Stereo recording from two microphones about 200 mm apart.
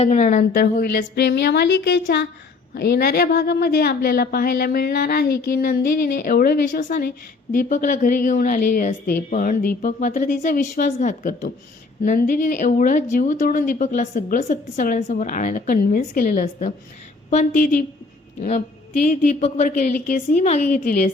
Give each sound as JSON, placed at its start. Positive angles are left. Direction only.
{"t": 0.0, "sound": "a woman's voice", "side_deg": 35}
{"t": 19.0, "sound": "a woman's voice", "side_deg": 40}